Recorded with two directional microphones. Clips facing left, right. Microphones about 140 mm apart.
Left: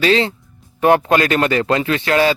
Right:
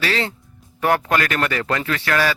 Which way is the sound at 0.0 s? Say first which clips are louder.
Left 8 dB; 20° left (ahead or behind).